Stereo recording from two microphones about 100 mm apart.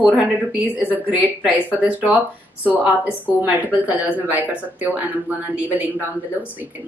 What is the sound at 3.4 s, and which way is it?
A woman's voice, 15° right (ahead or behind).